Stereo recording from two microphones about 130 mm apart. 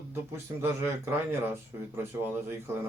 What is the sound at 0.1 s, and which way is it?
A man's voice, 15° right (ahead or behind).